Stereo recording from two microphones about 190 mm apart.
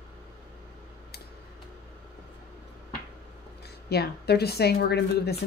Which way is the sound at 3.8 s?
60° left (ahead or behind).